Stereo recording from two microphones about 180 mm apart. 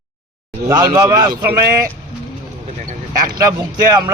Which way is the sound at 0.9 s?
20° right (ahead or behind).